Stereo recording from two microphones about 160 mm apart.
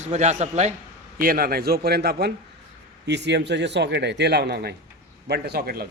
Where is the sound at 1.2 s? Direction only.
65° right (ahead or behind); by 4.8 s 90° right.